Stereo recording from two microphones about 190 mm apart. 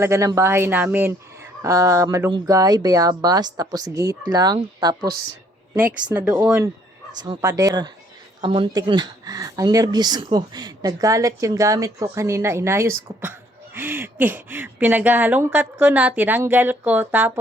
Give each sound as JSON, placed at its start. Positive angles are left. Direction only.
{"t": 0.0, "sound": "speech", "side_deg": -15}
{"t": 6.1, "sound": "speech", "side_deg": -10}